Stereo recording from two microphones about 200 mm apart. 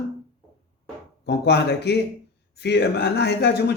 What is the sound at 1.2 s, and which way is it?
Speech, 55° left (ahead or behind).